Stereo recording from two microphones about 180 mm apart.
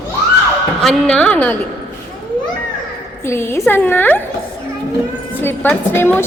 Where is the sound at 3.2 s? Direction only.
15° left (ahead or behind).